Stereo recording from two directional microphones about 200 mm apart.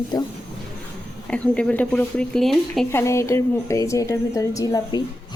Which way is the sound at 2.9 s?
15° left (ahead or behind).